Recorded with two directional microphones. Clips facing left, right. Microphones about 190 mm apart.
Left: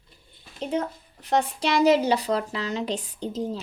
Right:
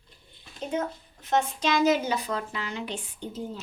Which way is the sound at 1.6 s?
35° left (ahead or behind).